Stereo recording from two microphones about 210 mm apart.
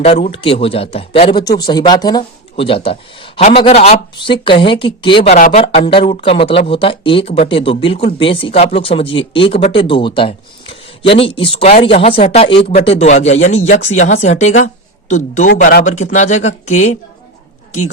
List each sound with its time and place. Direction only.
0.0 s speech: 30° left (ahead or behind)